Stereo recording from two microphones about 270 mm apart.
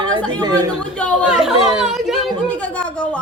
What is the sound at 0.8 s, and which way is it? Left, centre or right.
A woman's voice, centre.